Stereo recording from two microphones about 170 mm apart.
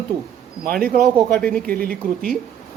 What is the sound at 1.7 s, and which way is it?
Speech, 60° right (ahead or behind).